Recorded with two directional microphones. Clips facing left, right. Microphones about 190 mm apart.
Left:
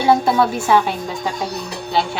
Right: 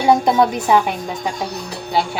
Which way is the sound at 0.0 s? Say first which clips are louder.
Right 1 dB; 20° right (ahead or behind).